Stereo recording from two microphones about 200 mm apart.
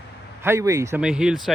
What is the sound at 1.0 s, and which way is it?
Speech, 5° right (ahead or behind).